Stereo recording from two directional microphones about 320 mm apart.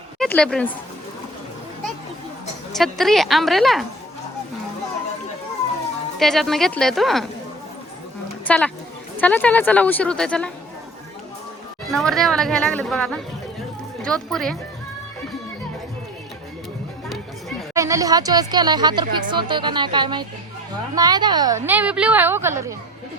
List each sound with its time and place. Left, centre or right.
0.2 s speech: centre
2.7 s speech: centre
6.1 s speech: centre
8.4 s speech: centre
11.9 s speech: centre
17.7 s a woman's voice: centre